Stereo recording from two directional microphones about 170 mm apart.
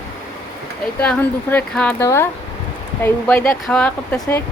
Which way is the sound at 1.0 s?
10° left (ahead or behind).